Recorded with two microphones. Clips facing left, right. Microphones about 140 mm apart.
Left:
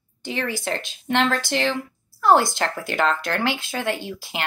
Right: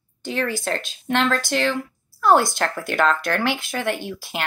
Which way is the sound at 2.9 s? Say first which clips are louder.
Right 2 dB; 55° right (ahead or behind).